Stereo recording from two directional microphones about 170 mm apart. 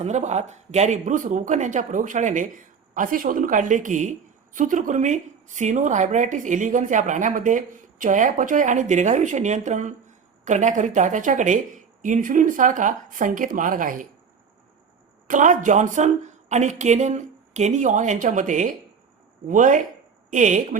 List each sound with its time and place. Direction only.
0.0 s a woman's voice: 40° right (ahead or behind)
15.3 s a woman's voice: 50° right (ahead or behind)